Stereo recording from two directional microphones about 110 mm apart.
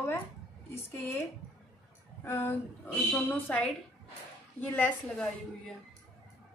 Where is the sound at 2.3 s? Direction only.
20° left (ahead or behind).